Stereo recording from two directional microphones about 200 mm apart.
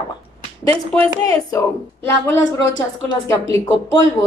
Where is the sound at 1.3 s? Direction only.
15° left (ahead or behind).